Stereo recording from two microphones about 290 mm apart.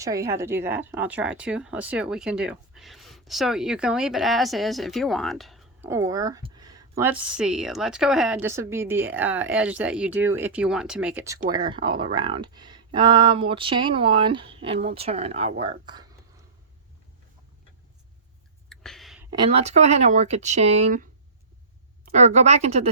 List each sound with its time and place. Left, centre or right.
0.0 s speech: centre
18.7 s a sound: centre
19.3 s speech: centre
22.1 s speech: right